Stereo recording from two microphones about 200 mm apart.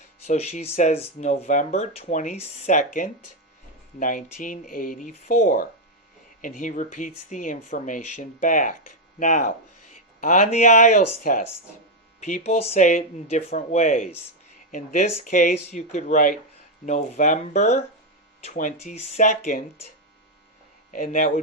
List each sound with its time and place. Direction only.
0.3 s speech: 35° left (ahead or behind)
20.9 s speech: 40° left (ahead or behind)